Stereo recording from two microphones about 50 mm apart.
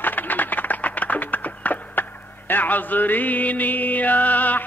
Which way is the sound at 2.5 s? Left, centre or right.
Left.